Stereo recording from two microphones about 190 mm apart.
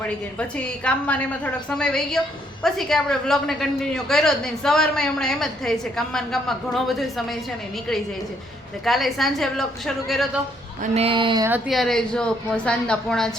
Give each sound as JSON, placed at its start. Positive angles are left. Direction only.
{"t": 0.9, "sound": "a woman's voice", "side_deg": 5}
{"t": 8.8, "sound": "a woman's voice", "side_deg": 0}
{"t": 10.9, "sound": "speech", "side_deg": -30}
{"t": 11.7, "sound": "a woman's voice", "side_deg": 0}